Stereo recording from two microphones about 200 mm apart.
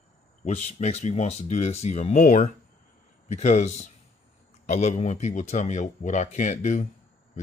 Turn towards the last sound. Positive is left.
turn(degrees=35)  # may be behind; listen again after turning